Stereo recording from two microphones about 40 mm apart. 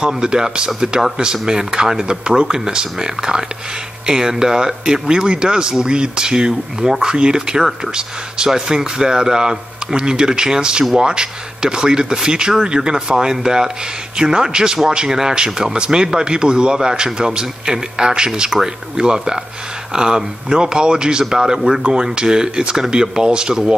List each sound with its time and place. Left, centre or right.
0.0 s a man's voice: centre